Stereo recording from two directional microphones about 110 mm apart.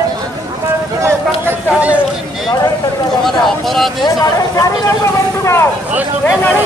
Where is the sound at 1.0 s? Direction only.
20° right (ahead or behind).